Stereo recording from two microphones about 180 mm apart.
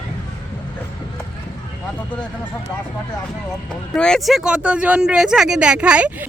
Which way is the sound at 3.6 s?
5° left (ahead or behind).